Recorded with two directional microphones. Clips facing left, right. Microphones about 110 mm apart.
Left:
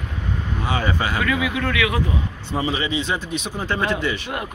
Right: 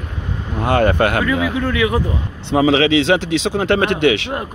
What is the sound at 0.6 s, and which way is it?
Speech, 55° right (ahead or behind).